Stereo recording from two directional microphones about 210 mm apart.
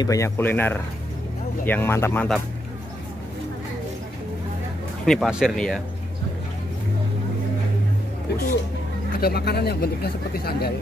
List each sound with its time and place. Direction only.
0.0 s speech: 15° left (ahead or behind)
5.0 s speech: centre (ahead or behind)
9.2 s speech: 50° left (ahead or behind)